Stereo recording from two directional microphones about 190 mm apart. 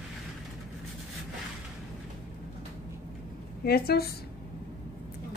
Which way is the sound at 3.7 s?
55° left (ahead or behind).